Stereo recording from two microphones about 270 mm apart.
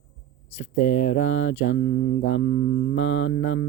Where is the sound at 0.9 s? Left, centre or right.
Left.